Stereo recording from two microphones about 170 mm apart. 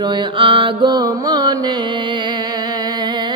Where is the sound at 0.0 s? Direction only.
25° right (ahead or behind).